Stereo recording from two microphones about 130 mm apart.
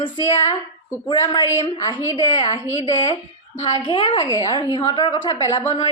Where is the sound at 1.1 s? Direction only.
35° left (ahead or behind).